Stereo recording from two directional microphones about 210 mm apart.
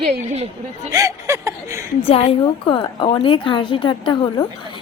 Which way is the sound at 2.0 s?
25° left (ahead or behind).